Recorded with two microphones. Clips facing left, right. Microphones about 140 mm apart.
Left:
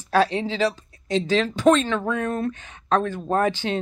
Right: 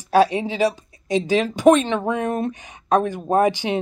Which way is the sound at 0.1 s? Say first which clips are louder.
Right 4 dB; 15° right (ahead or behind).